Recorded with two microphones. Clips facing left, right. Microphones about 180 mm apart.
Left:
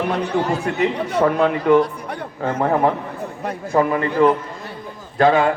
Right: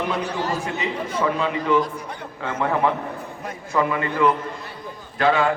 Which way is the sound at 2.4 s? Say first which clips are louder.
Left 4 dB; 35° left (ahead or behind).